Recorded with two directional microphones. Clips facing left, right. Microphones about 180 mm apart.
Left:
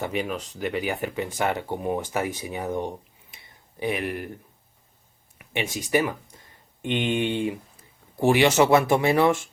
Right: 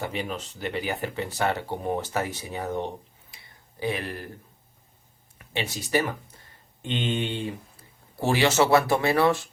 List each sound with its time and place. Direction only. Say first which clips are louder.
0.3 s speech: left 3 dB; 10° left (ahead or behind)
3.3 s a sound: left 3 dB; 20° left (ahead or behind)
5.4 s speech: left 2 dB; 15° left (ahead or behind)